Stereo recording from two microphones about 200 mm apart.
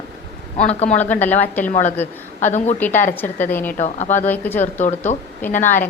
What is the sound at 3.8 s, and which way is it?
Speech, 35° left (ahead or behind).